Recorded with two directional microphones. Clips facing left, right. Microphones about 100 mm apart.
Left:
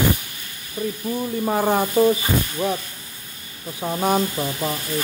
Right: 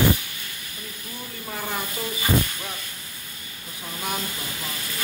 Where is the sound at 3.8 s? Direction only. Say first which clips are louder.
Left 11 dB; 45° left (ahead or behind).